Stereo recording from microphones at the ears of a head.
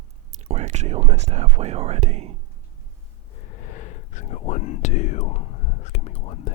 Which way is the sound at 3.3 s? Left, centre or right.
Left.